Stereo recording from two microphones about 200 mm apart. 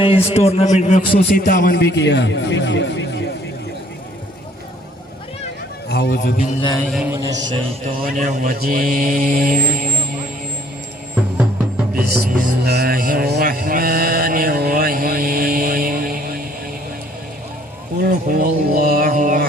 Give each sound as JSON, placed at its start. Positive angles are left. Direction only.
{"t": 0.0, "sound": "a man's voice", "side_deg": 30}
{"t": 5.9, "sound": "a man's voice", "side_deg": 55}
{"t": 6.6, "sound": "a sound", "side_deg": 20}
{"t": 6.8, "sound": "a man's voice", "side_deg": 0}
{"t": 7.1, "sound": "a man's voice", "side_deg": -15}
{"t": 7.9, "sound": "speech", "side_deg": -40}
{"t": 11.9, "sound": "music", "side_deg": -45}
{"t": 18.0, "sound": "a sound", "side_deg": -50}